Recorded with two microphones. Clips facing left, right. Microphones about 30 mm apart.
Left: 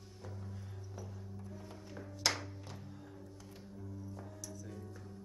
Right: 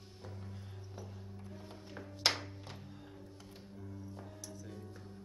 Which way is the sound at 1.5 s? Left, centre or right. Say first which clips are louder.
Right 2 dB; right.